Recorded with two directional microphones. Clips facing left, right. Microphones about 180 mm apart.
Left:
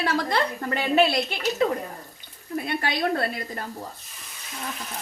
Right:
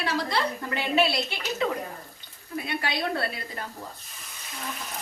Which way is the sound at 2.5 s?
50° left (ahead or behind).